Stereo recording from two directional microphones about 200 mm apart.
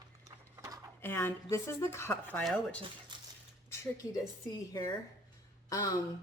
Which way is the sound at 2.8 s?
25° right (ahead or behind).